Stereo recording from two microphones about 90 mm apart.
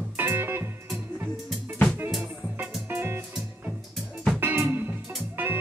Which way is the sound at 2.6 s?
25° right (ahead or behind).